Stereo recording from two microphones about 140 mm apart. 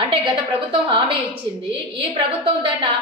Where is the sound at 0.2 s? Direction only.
35° right (ahead or behind).